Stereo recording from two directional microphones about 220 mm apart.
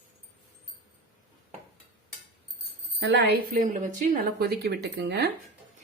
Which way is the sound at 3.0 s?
50° right (ahead or behind).